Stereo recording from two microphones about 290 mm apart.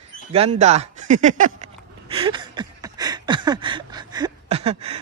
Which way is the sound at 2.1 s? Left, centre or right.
Centre.